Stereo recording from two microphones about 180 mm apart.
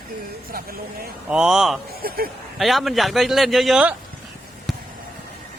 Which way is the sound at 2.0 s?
55° right (ahead or behind).